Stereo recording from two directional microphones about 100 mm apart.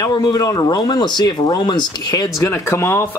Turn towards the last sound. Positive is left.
turn(degrees=30)  # may be behind; listen again after turning